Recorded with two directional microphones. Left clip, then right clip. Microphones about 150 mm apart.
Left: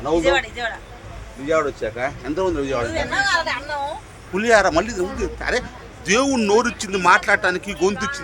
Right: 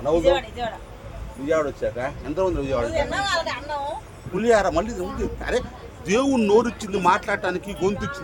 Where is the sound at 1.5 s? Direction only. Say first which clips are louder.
Left 2 dB; 10° left (ahead or behind).